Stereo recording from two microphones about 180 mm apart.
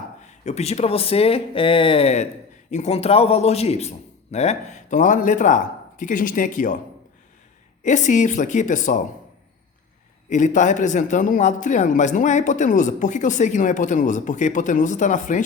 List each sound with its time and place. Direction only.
0.2 s a man's voice: 40° left (ahead or behind)
7.8 s a man's voice: 45° left (ahead or behind)
10.2 s a man's voice: 45° left (ahead or behind)